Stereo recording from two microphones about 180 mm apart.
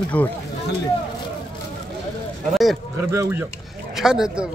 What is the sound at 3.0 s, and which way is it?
Speech, 15° right (ahead or behind).